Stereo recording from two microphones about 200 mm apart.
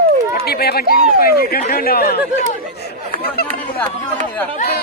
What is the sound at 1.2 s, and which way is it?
Speech, 45° left (ahead or behind).